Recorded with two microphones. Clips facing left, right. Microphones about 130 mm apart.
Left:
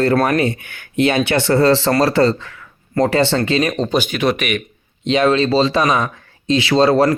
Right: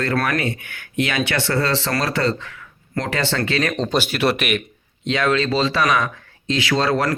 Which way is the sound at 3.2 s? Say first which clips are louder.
Left 5 dB; 25° left (ahead or behind).